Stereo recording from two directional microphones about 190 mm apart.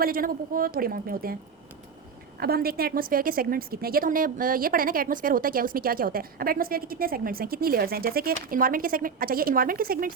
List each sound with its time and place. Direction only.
0.0 s a woman's voice: 50° right (ahead or behind)
2.4 s a woman's voice: 55° right (ahead or behind)